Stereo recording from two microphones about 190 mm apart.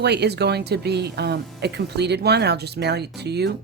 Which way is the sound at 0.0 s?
60° right (ahead or behind).